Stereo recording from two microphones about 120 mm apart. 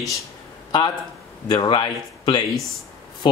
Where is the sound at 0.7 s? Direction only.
35° left (ahead or behind).